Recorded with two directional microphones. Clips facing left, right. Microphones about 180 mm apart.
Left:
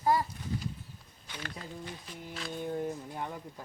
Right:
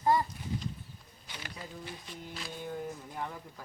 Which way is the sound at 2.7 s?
25° left (ahead or behind).